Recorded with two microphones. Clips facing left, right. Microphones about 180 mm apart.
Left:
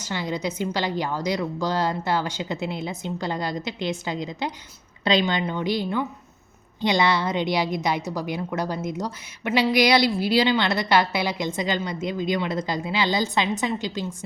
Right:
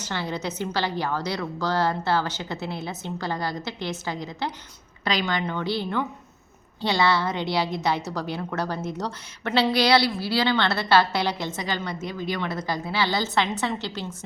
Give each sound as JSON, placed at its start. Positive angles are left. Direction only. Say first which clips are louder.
{"t": 0.1, "sound": "a woman's voice", "louder": "left 2 dB", "side_deg": 15}